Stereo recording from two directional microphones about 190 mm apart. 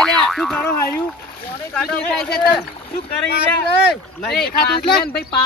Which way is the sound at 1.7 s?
Centre (ahead or behind).